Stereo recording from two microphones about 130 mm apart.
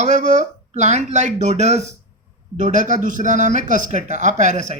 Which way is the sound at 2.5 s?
70° right (ahead or behind).